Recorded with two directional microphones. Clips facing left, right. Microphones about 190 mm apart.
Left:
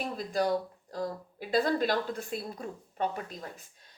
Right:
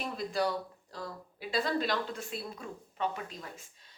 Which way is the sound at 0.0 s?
45° left (ahead or behind).